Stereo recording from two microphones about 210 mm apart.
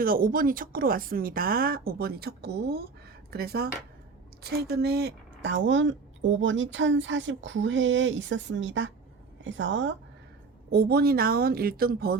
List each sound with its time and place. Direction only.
0.0 s a woman's voice: 45° right (ahead or behind); by 9.9 s 60° right (ahead or behind)
10.7 s speech: 50° right (ahead or behind)